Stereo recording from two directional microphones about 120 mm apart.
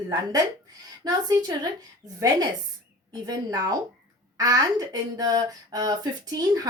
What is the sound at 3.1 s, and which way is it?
Speech, 35° right (ahead or behind).